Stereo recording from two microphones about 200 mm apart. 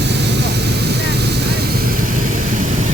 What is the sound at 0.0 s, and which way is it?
Vehicle, 60° right (ahead or behind).